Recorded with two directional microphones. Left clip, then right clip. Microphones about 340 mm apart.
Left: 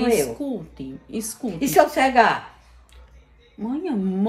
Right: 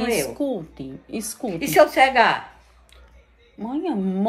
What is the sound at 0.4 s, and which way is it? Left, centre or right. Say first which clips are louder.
A woman's voice: right 4 dB; centre.